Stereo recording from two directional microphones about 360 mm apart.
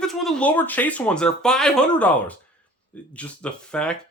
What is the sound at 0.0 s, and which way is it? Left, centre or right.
Speech, centre.